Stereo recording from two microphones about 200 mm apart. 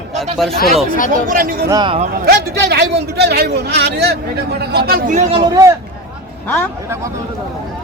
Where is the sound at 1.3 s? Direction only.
45° right (ahead or behind).